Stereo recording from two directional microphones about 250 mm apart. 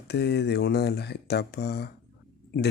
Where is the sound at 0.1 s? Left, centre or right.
Left.